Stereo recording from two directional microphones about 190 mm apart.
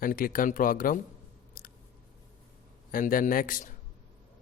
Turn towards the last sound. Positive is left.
turn(degrees=45)  # may be behind; listen again after turning